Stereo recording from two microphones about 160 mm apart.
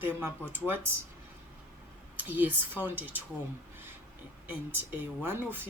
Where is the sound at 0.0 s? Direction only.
10° right (ahead or behind).